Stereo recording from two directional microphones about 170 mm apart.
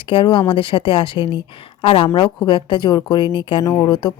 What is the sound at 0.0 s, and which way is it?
A woman's voice, 30° left (ahead or behind).